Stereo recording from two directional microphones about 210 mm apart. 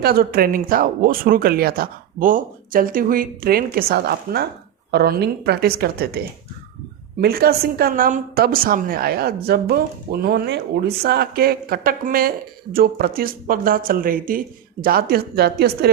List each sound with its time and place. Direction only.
0.0 s a woman's voice: 45° right (ahead or behind)